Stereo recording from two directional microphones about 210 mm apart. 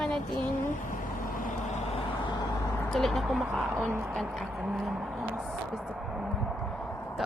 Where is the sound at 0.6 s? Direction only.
40° left (ahead or behind).